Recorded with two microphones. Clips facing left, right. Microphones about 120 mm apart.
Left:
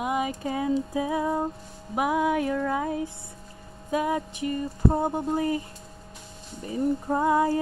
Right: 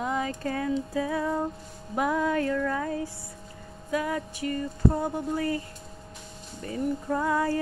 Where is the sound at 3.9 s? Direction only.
20° left (ahead or behind).